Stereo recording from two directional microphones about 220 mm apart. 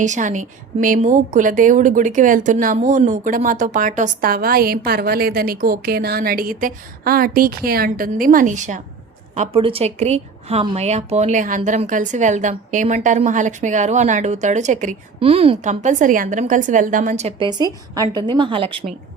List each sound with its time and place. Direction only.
0.0 s a woman's voice: 35° right (ahead or behind)